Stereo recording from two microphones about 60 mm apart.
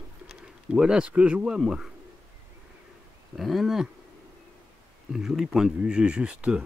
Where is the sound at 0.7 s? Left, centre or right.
Centre.